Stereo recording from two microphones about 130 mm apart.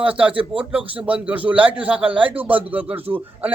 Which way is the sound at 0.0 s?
10° right (ahead or behind).